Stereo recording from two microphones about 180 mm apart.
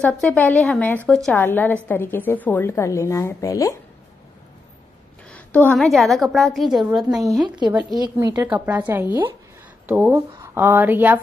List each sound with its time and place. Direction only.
0.0 s a woman's voice: 5° left (ahead or behind)
5.3 s a woman's voice: 10° left (ahead or behind)
7.4 s speech: 25° right (ahead or behind)
8.5 s speech: 10° right (ahead or behind)